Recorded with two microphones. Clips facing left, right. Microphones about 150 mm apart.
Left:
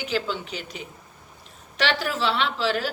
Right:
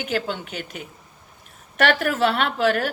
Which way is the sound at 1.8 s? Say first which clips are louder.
Right 5 dB; 55° right (ahead or behind).